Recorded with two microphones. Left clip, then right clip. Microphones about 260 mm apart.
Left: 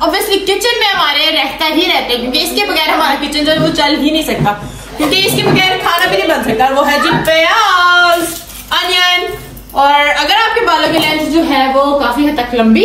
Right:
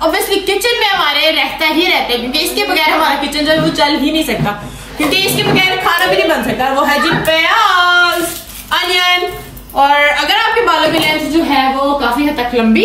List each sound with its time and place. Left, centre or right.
0.0 s a woman's voice: centre
12.1 s a woman's voice: centre